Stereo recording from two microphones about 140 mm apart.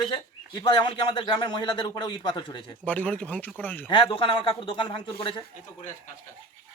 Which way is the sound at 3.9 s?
35° left (ahead or behind).